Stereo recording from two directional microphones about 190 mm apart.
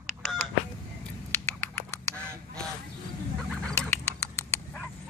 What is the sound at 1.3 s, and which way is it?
Duck, 10° left (ahead or behind).